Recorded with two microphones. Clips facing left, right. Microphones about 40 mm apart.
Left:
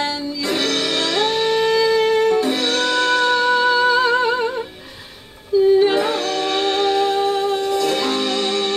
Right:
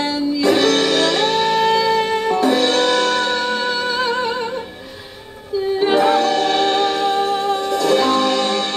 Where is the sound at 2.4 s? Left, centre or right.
Right.